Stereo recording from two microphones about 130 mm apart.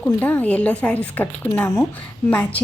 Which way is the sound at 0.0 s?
10° left (ahead or behind).